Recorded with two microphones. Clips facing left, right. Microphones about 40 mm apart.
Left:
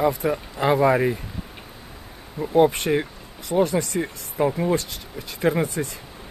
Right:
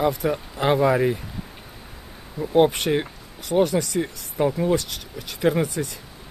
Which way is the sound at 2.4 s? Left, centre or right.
Left.